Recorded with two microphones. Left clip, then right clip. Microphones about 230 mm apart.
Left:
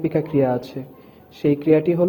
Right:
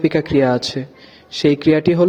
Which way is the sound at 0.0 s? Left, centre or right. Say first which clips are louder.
Right 4 dB; right.